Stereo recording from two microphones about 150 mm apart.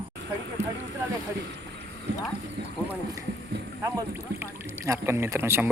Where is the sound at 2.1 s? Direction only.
90° right.